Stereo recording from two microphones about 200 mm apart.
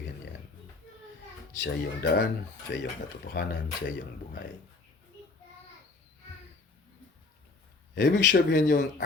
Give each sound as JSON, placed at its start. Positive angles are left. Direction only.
{"t": 1.6, "sound": "speech", "side_deg": 60}
{"t": 8.0, "sound": "speech", "side_deg": 60}